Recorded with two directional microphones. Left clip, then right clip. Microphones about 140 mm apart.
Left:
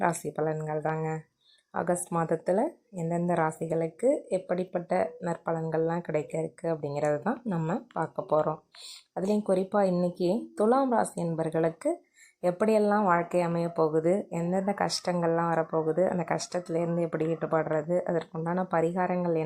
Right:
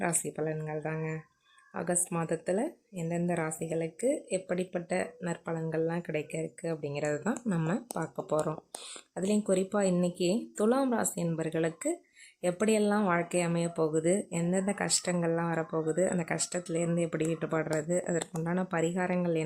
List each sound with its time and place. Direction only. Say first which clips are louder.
0.3 s speech: left 4 dB; 15° right (ahead or behind)
7.4 s speech: left 1 dB; 30° right (ahead or behind)
8.1 s speech: left 5 dB; 15° right (ahead or behind)
13.9 s speech: left 3 dB; 25° right (ahead or behind)